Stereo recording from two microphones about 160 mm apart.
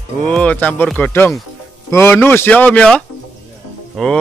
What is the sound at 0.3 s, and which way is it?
A man's voice, 10° left (ahead or behind).